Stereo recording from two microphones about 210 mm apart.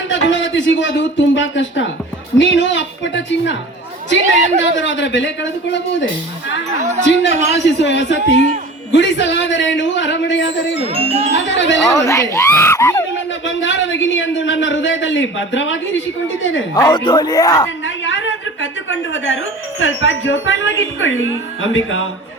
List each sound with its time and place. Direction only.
0.1 s a man's voice: 60° left (ahead or behind)
4.2 s speech: 35° right (ahead or behind)
4.8 s a man's voice: 60° left (ahead or behind)
7.0 s a man's voice: 60° left (ahead or behind)
10.9 s speech: 30° right (ahead or behind)
11.3 s a man's voice: 60° left (ahead or behind)
11.9 s speech: 15° left (ahead or behind)
13.4 s a man's voice: 60° left (ahead or behind)
16.7 s speech: 20° left (ahead or behind)
17.8 s a sound: 65° left (ahead or behind)
19.8 s a man's voice: 65° left (ahead or behind)